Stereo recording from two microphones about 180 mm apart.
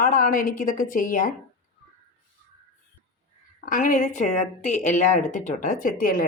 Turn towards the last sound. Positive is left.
turn(degrees=55)  # may be behind; listen again after turning